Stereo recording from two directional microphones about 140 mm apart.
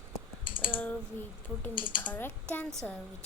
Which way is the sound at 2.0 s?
10° left (ahead or behind).